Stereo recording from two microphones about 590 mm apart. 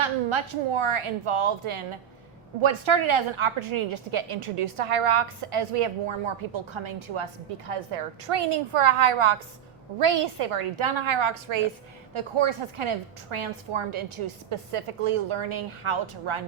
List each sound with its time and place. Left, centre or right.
0.0 s a woman's voice: right